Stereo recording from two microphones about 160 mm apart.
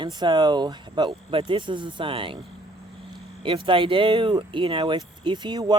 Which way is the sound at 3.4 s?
30° right (ahead or behind).